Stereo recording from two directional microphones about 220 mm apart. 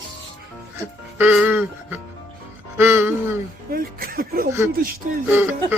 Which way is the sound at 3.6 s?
40° right (ahead or behind).